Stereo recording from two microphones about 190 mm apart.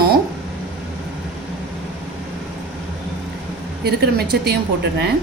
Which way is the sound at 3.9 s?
60° right (ahead or behind).